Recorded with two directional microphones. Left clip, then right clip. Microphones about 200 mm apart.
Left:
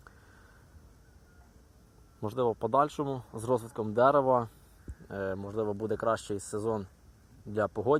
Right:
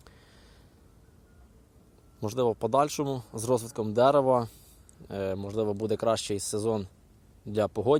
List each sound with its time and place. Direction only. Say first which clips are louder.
2.2 s speech: right 3 dB; 15° right (ahead or behind)